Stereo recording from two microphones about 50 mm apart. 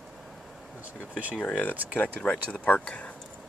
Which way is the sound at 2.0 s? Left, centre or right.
Left.